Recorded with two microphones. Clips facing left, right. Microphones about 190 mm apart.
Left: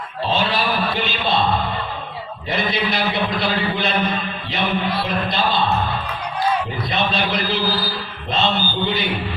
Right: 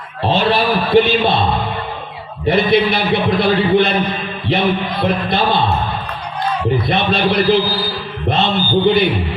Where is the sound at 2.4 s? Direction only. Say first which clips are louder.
Right 10 dB; 60° right (ahead or behind).